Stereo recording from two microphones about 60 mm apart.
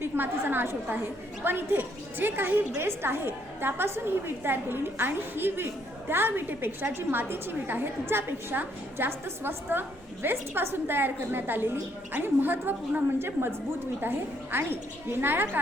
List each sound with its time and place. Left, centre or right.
0.0 s a woman's voice: right